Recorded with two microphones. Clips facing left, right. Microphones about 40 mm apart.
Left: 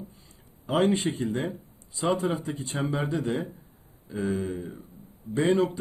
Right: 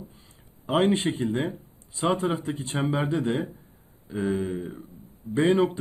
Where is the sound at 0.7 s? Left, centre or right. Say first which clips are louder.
Right 1 dB; right.